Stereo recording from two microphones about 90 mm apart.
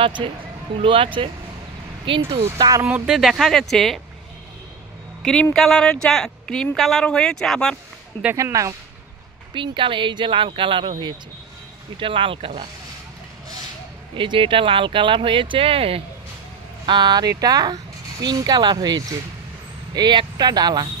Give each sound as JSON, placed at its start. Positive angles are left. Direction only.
{"t": 0.0, "sound": "speech", "side_deg": -80}
{"t": 2.0, "sound": "speech", "side_deg": -70}
{"t": 3.1, "sound": "speech", "side_deg": 0}
{"t": 5.2, "sound": "speech", "side_deg": 10}
{"t": 8.4, "sound": "speech", "side_deg": -35}
{"t": 9.5, "sound": "speech", "side_deg": -65}
{"t": 12.0, "sound": "speech", "side_deg": -80}
{"t": 14.1, "sound": "speech", "side_deg": -70}
{"t": 16.8, "sound": "speech", "side_deg": -55}